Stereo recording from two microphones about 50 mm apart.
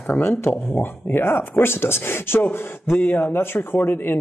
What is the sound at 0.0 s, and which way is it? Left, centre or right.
Speech, left.